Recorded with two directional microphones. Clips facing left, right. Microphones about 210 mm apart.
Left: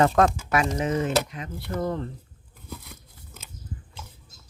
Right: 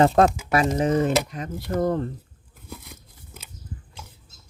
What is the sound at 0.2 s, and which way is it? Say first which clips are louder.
Speech: right 3 dB; 30° right (ahead or behind).